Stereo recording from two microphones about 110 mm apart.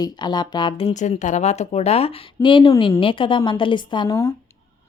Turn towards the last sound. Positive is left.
turn(degrees=45)  # may be behind; listen again after turning